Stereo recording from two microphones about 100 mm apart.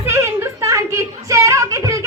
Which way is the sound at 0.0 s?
25° right (ahead or behind).